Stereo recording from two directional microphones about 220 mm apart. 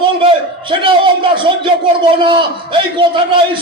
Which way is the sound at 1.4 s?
20° right (ahead or behind).